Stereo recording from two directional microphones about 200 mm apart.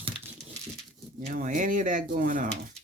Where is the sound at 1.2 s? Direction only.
40° right (ahead or behind).